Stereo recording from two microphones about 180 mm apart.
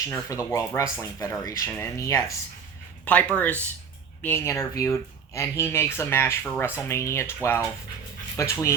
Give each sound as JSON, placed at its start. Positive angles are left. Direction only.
{"t": 0.0, "sound": "speech", "side_deg": 20}